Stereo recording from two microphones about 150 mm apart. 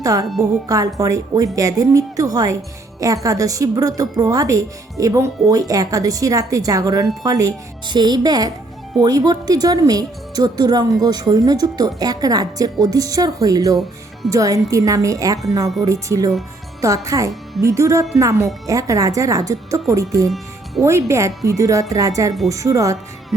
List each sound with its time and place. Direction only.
0.0 s speech: 25° right (ahead or behind)
20.8 s speech: 20° right (ahead or behind)